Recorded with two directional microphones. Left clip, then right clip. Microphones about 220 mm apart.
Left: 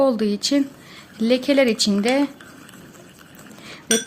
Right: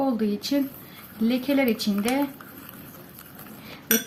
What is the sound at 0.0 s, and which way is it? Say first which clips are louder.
A woman's voice: left 7 dB; 45° left (ahead or behind).